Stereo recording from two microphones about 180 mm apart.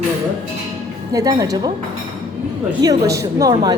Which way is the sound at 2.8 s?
20° right (ahead or behind).